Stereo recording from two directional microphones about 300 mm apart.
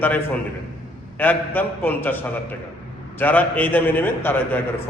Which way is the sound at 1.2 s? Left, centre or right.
Centre.